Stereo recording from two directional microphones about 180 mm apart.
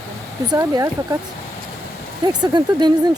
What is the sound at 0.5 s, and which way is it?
Speech, 20° right (ahead or behind).